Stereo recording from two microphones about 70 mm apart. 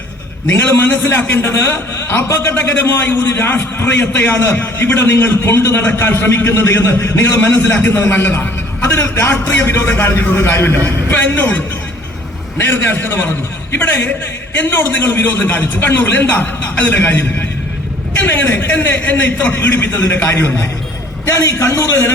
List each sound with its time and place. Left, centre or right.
0.5 s a man's voice: left